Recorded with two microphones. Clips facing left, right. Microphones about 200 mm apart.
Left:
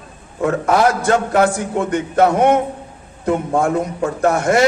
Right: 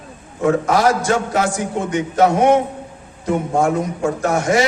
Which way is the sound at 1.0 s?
60° left (ahead or behind).